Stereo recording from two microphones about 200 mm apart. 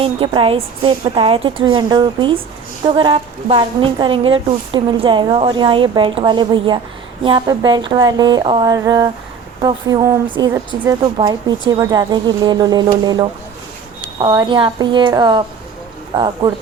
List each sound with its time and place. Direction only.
0.0 s a woman's voice: 25° right (ahead or behind)